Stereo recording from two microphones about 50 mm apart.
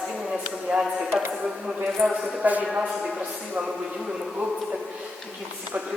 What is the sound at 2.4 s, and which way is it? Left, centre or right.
Speech, right.